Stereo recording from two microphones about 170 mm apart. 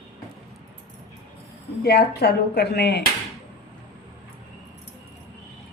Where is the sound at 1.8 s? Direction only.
70° left (ahead or behind).